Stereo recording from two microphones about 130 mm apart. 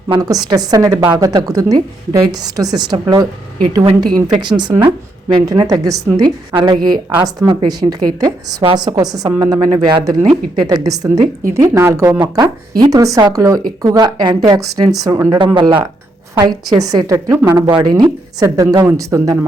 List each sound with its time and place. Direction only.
0.1 s a woman's voice: 30° right (ahead or behind)
6.5 s a woman's voice: 40° right (ahead or behind)